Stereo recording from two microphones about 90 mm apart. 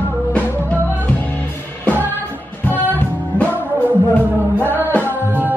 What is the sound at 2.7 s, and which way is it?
Music, 20° left (ahead or behind).